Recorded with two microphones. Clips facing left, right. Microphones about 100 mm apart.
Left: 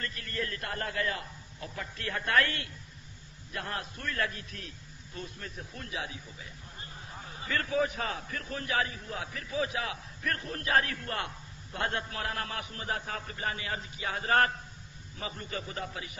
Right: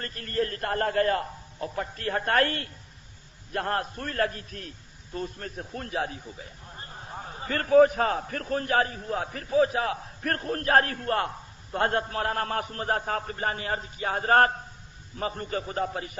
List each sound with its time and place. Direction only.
0.0 s a man's voice: 40° right (ahead or behind)